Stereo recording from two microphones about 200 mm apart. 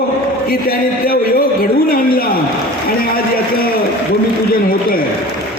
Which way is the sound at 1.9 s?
50° left (ahead or behind).